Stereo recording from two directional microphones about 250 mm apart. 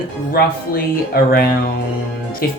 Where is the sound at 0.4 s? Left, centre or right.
Left.